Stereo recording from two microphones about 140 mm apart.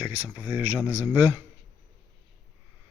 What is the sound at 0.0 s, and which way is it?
Speech, 10° right (ahead or behind).